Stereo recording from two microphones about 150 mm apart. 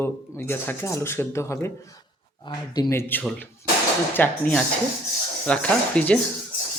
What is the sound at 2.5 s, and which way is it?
Speech, 30° left (ahead or behind).